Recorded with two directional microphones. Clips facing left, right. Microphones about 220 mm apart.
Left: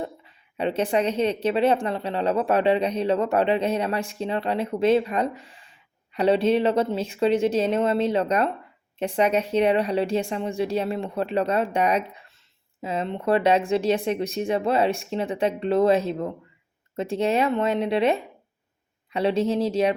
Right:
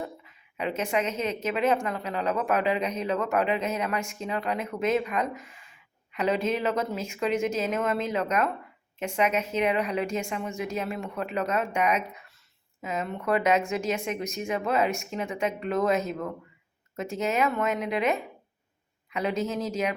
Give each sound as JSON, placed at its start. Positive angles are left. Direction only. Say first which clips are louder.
{"t": 0.0, "sound": "a woman's voice", "louder": "left 4 dB", "side_deg": 30}